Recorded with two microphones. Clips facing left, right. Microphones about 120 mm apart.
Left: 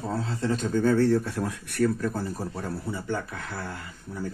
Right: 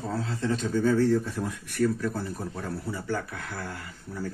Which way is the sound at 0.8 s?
60° left (ahead or behind).